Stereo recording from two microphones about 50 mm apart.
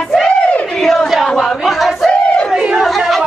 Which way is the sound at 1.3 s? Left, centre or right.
Centre.